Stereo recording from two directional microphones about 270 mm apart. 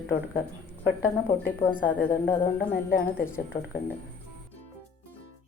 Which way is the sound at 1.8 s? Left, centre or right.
Left.